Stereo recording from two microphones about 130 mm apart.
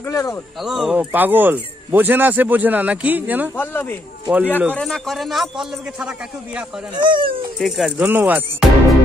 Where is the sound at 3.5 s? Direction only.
15° left (ahead or behind).